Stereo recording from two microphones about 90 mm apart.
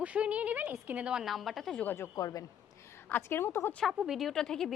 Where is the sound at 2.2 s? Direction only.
45° left (ahead or behind).